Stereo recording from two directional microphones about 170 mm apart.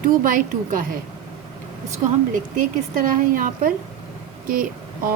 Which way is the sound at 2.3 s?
50° right (ahead or behind).